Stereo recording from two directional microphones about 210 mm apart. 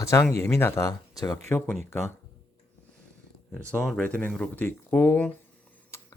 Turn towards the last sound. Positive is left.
turn(degrees=15)  # may be behind; listen again after turning